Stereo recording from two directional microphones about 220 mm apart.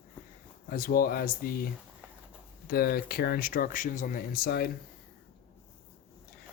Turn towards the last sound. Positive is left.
turn(degrees=45)  # may be behind; listen again after turning